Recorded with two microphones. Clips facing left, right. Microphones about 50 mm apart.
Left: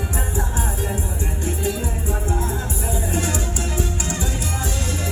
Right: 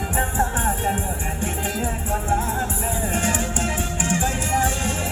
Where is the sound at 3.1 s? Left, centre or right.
Right.